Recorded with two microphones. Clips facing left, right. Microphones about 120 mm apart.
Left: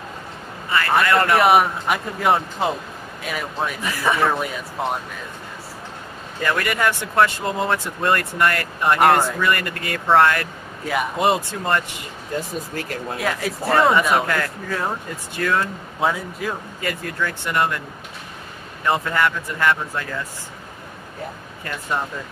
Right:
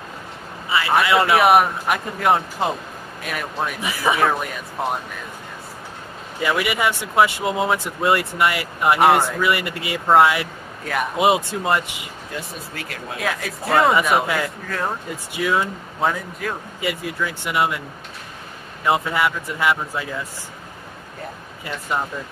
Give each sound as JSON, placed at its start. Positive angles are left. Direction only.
{"t": 0.7, "sound": "a man's voice", "side_deg": -5}
{"t": 6.4, "sound": "speech", "side_deg": -10}
{"t": 12.7, "sound": "speech", "side_deg": 40}
{"t": 13.2, "sound": "a man's voice", "side_deg": 0}
{"t": 16.8, "sound": "speech", "side_deg": -10}
{"t": 18.9, "sound": "speech", "side_deg": -10}